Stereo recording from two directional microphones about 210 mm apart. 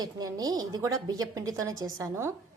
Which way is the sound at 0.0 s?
20° right (ahead or behind).